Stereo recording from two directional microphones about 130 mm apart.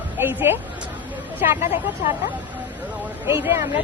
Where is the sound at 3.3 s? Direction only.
20° right (ahead or behind).